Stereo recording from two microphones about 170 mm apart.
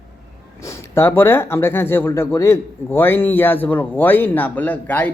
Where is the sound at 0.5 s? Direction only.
15° left (ahead or behind).